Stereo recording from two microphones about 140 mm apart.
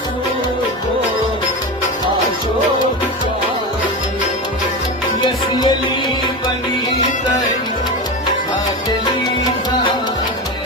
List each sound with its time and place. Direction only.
5.2 s music: 30° left (ahead or behind)